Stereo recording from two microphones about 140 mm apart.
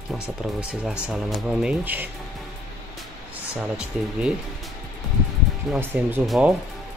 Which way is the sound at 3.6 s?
10° right (ahead or behind).